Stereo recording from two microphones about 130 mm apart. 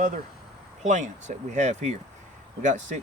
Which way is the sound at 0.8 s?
70° right (ahead or behind).